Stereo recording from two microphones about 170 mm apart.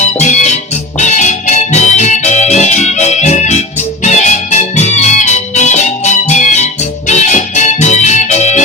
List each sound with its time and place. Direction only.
0.0 s music: 45° left (ahead or behind)
7.1 s organ: 45° left (ahead or behind)